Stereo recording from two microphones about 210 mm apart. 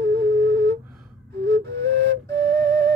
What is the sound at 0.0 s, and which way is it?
Flute, 50° right (ahead or behind).